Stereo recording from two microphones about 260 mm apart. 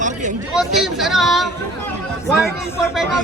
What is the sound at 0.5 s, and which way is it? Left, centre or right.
Speech, centre.